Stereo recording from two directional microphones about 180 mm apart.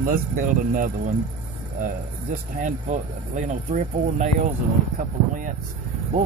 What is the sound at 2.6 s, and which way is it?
Speech, 45° right (ahead or behind).